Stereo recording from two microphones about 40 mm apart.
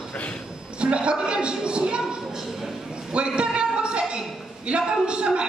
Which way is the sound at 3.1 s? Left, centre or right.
Right.